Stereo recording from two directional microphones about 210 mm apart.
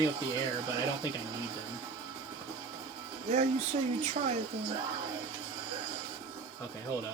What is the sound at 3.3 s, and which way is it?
Speech, 30° right (ahead or behind).